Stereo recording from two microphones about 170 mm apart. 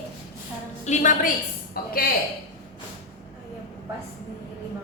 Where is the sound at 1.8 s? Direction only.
60° left (ahead or behind).